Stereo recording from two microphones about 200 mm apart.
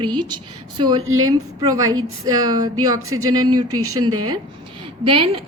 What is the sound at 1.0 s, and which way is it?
Speech, 90° right.